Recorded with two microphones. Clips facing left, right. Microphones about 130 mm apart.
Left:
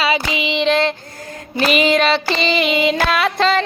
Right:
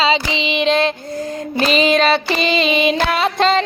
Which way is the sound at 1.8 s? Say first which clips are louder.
Right 2 dB; 25° right (ahead or behind).